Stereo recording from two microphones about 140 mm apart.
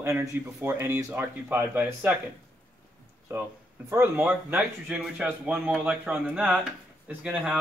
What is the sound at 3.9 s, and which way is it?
A man's voice, 15° right (ahead or behind).